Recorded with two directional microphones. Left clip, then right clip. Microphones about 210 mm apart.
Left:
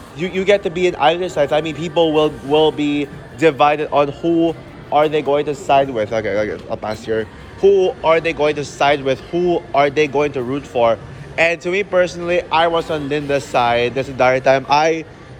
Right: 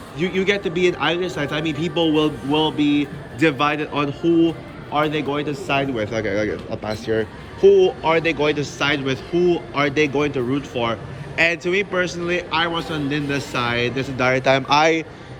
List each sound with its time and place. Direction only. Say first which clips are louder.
0.2 s a man's voice: left 5 dB; 15° left (ahead or behind)